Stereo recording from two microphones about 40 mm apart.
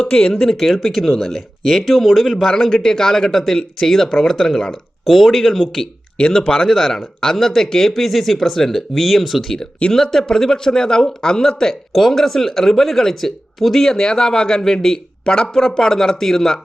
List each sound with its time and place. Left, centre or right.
0.0 s speech: centre
0.5 s speech: centre
4.7 s speech: centre
6.1 s speech: left
6.6 s speech: centre
15.2 s speech: left